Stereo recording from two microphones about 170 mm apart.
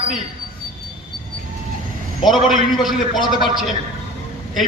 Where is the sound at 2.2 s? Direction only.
Centre (ahead or behind).